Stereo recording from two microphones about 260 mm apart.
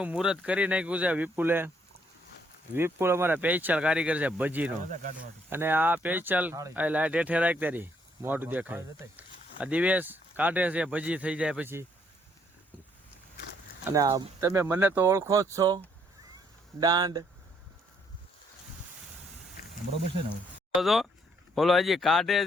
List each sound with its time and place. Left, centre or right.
0.0 s speech: centre
2.7 s speech: centre
4.8 s speech: right
5.5 s speech: centre
13.8 s speech: centre
20.7 s speech: centre